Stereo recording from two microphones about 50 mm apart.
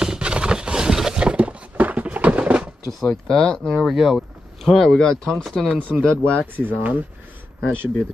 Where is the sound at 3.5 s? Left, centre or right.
Centre.